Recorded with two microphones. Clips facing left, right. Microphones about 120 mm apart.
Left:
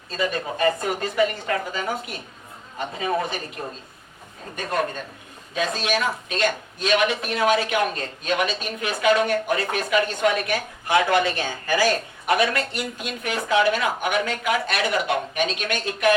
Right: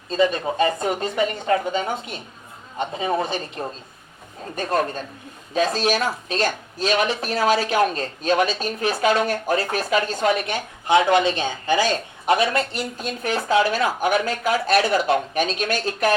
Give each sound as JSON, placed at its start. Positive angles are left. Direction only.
{"t": 0.1, "sound": "speech", "side_deg": -25}
{"t": 5.5, "sound": "speech", "side_deg": -35}